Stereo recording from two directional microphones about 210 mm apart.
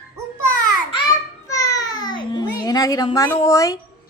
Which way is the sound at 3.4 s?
15° left (ahead or behind).